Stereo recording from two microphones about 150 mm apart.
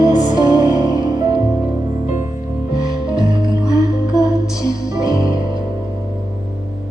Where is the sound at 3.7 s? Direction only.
20° left (ahead or behind).